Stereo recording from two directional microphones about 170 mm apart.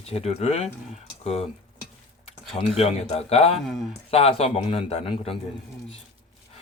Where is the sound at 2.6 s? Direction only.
35° left (ahead or behind).